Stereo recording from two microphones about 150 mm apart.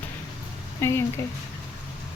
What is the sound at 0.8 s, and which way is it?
Speech, 15° left (ahead or behind).